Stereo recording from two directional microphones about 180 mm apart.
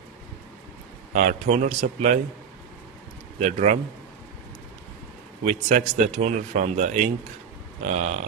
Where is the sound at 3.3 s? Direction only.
40° right (ahead or behind).